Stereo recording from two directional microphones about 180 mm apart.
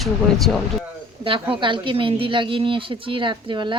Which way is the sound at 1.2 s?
30° right (ahead or behind).